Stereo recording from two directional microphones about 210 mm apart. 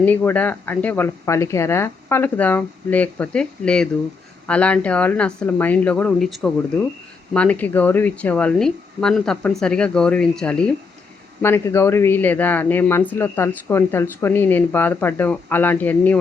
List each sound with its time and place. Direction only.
0.0 s speech: 10° left (ahead or behind)